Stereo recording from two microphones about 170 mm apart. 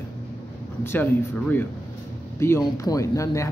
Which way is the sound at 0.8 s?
10° left (ahead or behind).